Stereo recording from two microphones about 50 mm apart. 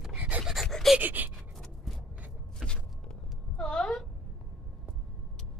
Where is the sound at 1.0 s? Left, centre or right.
Right.